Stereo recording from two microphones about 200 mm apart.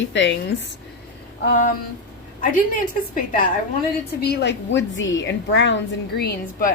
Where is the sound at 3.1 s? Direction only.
45° left (ahead or behind).